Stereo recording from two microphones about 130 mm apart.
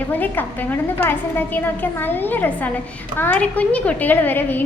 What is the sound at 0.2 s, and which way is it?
A woman's voice, 15° left (ahead or behind).